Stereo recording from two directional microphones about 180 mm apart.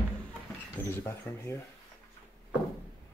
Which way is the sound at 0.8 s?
15° left (ahead or behind).